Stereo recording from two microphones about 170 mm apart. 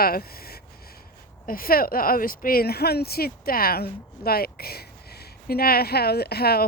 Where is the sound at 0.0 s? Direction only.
60° left (ahead or behind).